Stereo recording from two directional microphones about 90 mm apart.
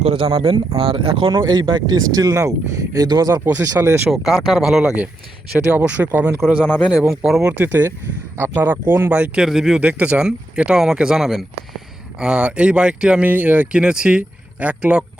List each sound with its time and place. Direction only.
0.0 s speech: 90° right; by 1.4 s 70° right (ahead or behind)
1.4 s speech: 50° right (ahead or behind)
3.4 s speech: 30° right (ahead or behind)
4.1 s speech: centre (ahead or behind); by 6.4 s 25° right (ahead or behind)
7.1 s speech: 5° right (ahead or behind)
7.6 s speech: 20° right (ahead or behind)